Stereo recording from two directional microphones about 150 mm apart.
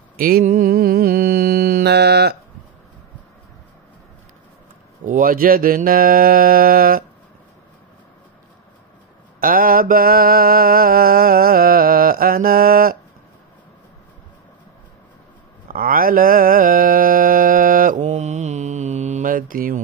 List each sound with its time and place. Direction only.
0.2 s mantra: 75° right (ahead or behind)
5.0 s mantra: 65° right (ahead or behind)
9.4 s mantra: 70° right (ahead or behind)
15.7 s mantra: 75° right (ahead or behind)